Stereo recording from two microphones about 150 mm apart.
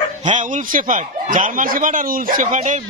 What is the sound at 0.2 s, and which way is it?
Speech, 55° right (ahead or behind).